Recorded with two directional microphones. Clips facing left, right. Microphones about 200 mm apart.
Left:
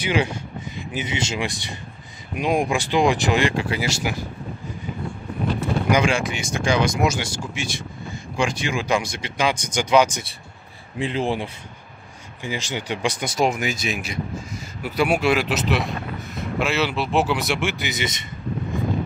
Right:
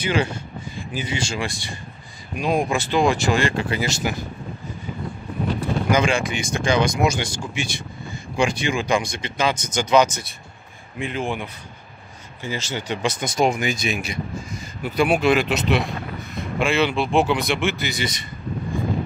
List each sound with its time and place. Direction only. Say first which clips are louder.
0.0 s speech: even; 15° left (ahead or behind)
5.6 s a sound: even; 15° left (ahead or behind)
6.6 s speech: even; 5° left (ahead or behind)
11.0 s speech: left 3 dB; 30° left (ahead or behind)
12.4 s speech: even; 15° left (ahead or behind)